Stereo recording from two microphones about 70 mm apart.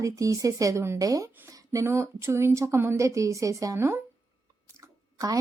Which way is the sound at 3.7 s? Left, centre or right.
Right.